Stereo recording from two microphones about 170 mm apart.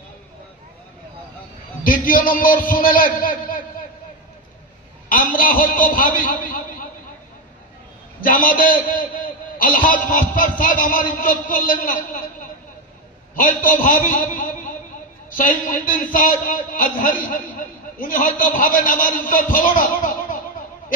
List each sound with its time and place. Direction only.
1.8 s a man's voice: 55° left (ahead or behind)
5.1 s a man's voice: 55° left (ahead or behind)
8.2 s a man's voice: 55° left (ahead or behind)
13.7 s a man's voice: 50° left (ahead or behind)
20.0 s music: 50° left (ahead or behind)